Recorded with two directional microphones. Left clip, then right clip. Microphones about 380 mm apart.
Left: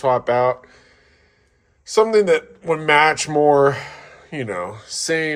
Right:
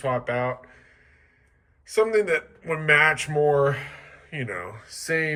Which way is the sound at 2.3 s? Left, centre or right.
Centre.